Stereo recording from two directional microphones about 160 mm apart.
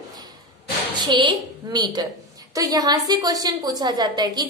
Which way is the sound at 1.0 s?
30° right (ahead or behind).